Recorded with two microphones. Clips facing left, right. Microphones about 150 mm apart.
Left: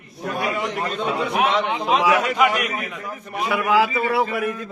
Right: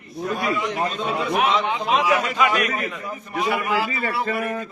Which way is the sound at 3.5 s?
90° left.